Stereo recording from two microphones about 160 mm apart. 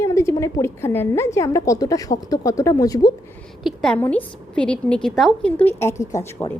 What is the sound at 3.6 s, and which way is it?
A woman's voice, 5° left (ahead or behind).